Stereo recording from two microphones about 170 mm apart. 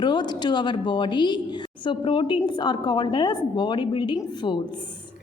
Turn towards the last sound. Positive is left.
turn(degrees=25)  # may be behind; listen again after turning